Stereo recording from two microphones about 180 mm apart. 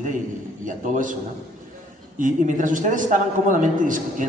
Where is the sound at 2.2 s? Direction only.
45° right (ahead or behind).